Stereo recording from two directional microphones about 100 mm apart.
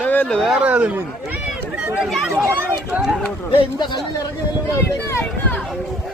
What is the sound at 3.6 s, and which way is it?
Speech, 50° left (ahead or behind).